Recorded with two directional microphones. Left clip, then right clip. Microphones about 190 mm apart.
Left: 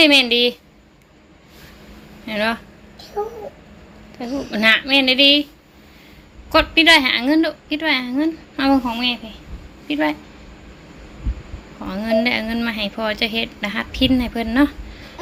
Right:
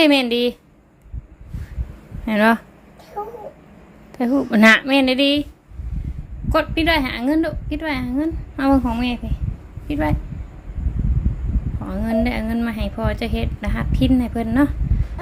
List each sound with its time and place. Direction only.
0.0 s a woman's voice: 25° right (ahead or behind)
2.2 s speech: 35° right (ahead or behind)
3.2 s a woman's voice: 20° right (ahead or behind)
4.4 s speech: 35° right (ahead or behind)
6.5 s a woman's voice: 20° right (ahead or behind)
11.9 s a woman's voice: 20° right (ahead or behind)